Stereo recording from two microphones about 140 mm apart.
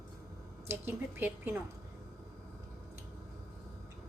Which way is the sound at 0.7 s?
15° right (ahead or behind).